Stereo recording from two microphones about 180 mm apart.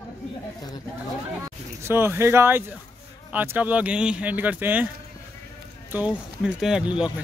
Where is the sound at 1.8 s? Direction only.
15° right (ahead or behind).